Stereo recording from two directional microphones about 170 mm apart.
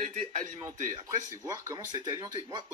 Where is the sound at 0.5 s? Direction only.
20° right (ahead or behind).